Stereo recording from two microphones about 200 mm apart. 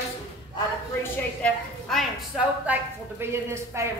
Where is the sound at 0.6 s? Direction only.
10° left (ahead or behind).